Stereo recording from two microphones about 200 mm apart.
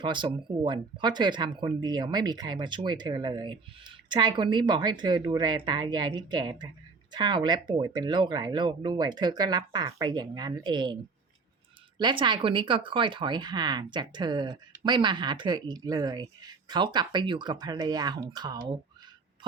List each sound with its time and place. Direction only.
0.0 s speech: 25° right (ahead or behind)
11.9 s speech: 25° right (ahead or behind)